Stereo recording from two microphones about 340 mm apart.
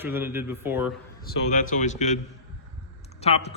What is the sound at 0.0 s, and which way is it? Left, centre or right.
Speech, centre.